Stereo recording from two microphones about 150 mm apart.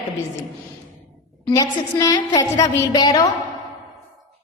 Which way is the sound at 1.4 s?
25° left (ahead or behind).